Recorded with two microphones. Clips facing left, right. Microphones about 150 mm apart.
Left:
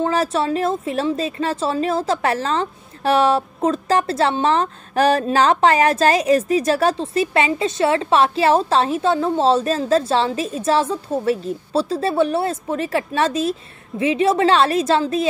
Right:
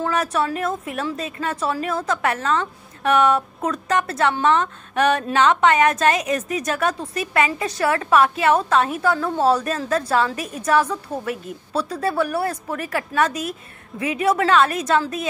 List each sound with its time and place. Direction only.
0.0 s a woman's voice: 30° left (ahead or behind)